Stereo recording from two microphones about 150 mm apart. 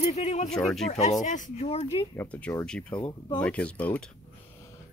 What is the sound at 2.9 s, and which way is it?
Speech, 30° left (ahead or behind).